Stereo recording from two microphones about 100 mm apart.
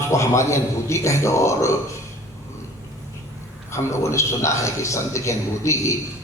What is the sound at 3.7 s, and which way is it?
A man's voice, 30° left (ahead or behind).